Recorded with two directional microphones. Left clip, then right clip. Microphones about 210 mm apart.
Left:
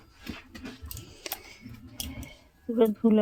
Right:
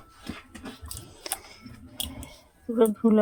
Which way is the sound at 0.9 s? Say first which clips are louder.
Right 1 dB; 5° left (ahead or behind).